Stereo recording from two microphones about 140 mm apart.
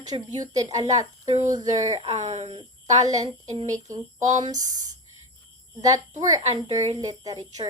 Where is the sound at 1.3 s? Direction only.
55° right (ahead or behind).